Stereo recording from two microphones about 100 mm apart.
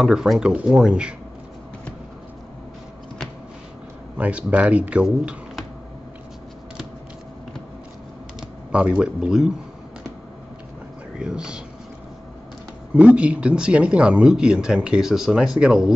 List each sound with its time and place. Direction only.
0.0 s speech: 5° right (ahead or behind)
4.2 s speech: 15° right (ahead or behind)
8.4 s speech: 10° right (ahead or behind)
11.1 s speech: 10° right (ahead or behind)
12.9 s speech: 10° right (ahead or behind)